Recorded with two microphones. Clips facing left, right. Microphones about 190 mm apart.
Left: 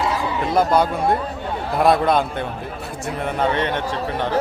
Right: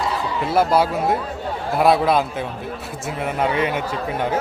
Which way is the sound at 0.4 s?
5° right (ahead or behind).